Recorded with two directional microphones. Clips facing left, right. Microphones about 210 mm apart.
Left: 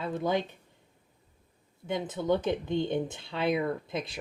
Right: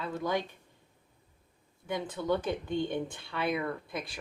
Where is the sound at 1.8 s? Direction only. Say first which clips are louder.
Left 3 dB; 20° left (ahead or behind).